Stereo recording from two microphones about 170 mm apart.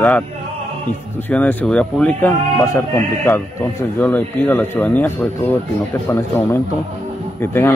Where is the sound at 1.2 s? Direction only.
10° left (ahead or behind).